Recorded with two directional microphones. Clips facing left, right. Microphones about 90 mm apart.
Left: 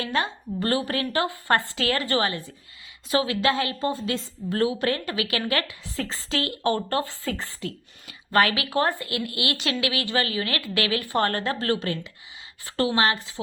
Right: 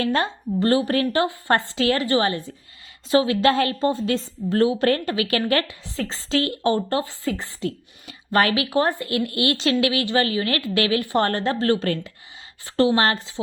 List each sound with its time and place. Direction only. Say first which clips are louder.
0.0 s a woman's voice: right 4 dB; 35° right (ahead or behind); by 2.3 s 20° right (ahead or behind)
3.1 s a woman's voice: right 5 dB; 30° right (ahead or behind)
9.0 s a woman's voice: right 6 dB; 35° right (ahead or behind)